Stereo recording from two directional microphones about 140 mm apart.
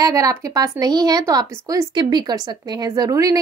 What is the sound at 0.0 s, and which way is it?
Speech, 25° right (ahead or behind).